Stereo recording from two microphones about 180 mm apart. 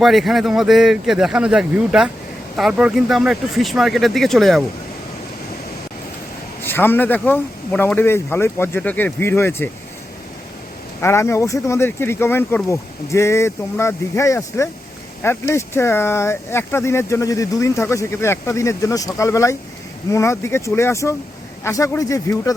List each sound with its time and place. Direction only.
0.0 s a man's voice: centre (ahead or behind)
6.6 s speech: 10° left (ahead or behind)
11.0 s speech: 15° left (ahead or behind)